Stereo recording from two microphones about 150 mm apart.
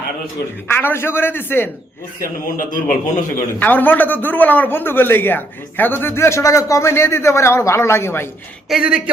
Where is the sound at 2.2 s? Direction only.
65° left (ahead or behind).